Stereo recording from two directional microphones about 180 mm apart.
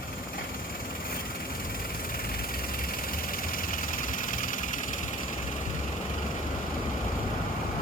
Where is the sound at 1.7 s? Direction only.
55° left (ahead or behind).